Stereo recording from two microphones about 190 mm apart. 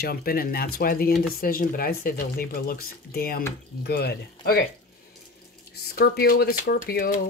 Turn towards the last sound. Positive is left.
turn(degrees=50)  # may be behind; listen again after turning